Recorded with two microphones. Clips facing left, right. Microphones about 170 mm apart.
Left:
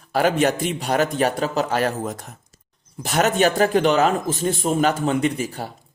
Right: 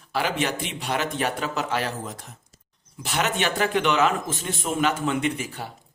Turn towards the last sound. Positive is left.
turn(degrees=40)  # may be behind; listen again after turning